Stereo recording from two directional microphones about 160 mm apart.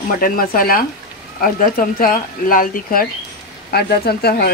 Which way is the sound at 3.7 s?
80° left.